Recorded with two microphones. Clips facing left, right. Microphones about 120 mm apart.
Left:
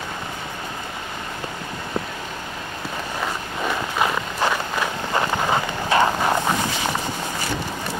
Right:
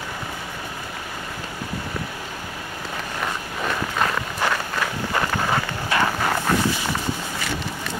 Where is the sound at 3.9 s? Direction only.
15° left (ahead or behind).